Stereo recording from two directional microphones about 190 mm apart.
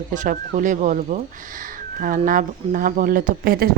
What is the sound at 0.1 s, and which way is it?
Speech, 40° right (ahead or behind).